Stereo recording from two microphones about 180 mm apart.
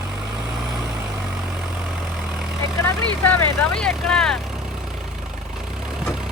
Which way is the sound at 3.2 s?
5° left (ahead or behind).